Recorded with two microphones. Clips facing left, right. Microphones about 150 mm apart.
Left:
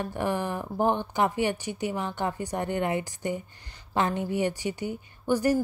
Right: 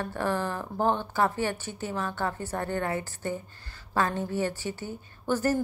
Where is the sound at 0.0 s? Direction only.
15° left (ahead or behind).